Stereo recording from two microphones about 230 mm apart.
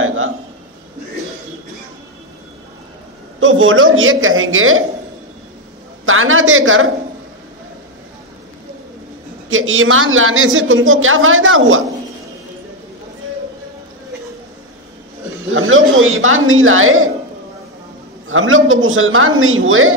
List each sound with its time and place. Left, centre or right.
0.0 s a sound: right
3.3 s a woman's voice: right
6.0 s a woman's voice: right
9.5 s a woman's voice: right
15.5 s speech: right
18.3 s a woman's voice: right